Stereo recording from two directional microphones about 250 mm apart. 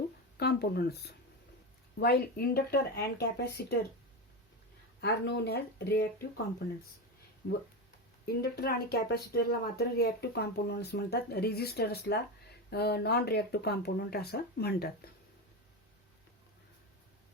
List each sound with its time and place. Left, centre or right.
0.3 s speech: left
4.9 s speech: left
8.4 s speech: left